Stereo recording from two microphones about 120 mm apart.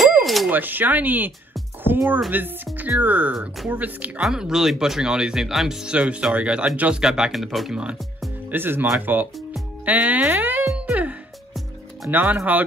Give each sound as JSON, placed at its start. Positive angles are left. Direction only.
{"t": 0.2, "sound": "a sound", "side_deg": 0}
{"t": 0.5, "sound": "speech", "side_deg": -15}
{"t": 2.3, "sound": "speech", "side_deg": -15}
{"t": 10.7, "sound": "music", "side_deg": -10}
{"t": 12.1, "sound": "speech", "side_deg": -15}